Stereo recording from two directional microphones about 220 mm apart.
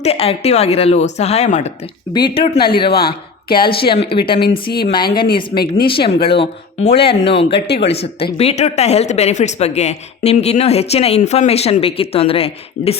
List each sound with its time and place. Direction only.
0.0 s speech: 25° left (ahead or behind)
3.5 s speech: 40° left (ahead or behind)
3.8 s speech: 25° left (ahead or behind)
4.4 s speech: 45° left (ahead or behind)
5.9 s speech: 25° left (ahead or behind)